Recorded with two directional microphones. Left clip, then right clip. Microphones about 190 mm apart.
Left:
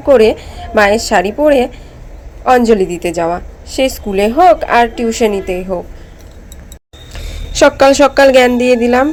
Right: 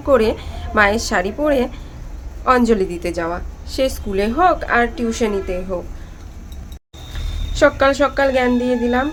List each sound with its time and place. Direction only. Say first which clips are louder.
0.0 s a woman's voice: left 7 dB; 20° left (ahead or behind)
7.5 s a woman's voice: left 7 dB; 45° left (ahead or behind)